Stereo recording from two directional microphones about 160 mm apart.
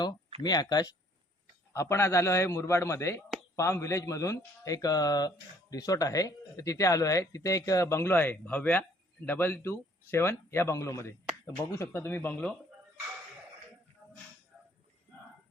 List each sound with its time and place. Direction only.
0.4 s speech: 25° left (ahead or behind); by 12.5 s 10° left (ahead or behind)